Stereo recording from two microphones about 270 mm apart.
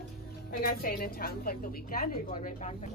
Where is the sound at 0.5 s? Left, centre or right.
Left.